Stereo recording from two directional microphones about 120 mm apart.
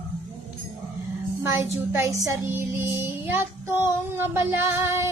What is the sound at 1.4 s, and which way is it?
Child singing, 20° right (ahead or behind).